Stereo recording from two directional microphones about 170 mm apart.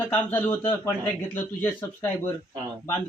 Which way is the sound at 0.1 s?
10° left (ahead or behind).